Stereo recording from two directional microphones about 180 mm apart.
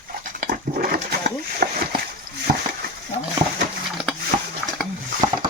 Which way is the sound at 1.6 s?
50° right (ahead or behind).